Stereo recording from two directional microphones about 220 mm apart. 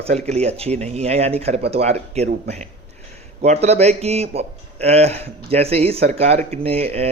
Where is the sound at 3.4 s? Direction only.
30° right (ahead or behind).